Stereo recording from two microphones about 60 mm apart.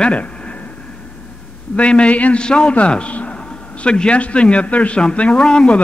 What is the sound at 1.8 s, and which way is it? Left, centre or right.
A man's voice, centre.